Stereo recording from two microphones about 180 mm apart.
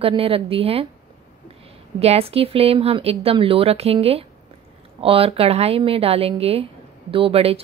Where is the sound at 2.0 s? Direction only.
35° right (ahead or behind).